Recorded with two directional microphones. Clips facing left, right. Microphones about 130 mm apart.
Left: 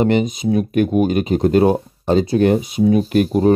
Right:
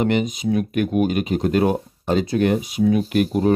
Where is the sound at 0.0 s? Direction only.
35° left (ahead or behind).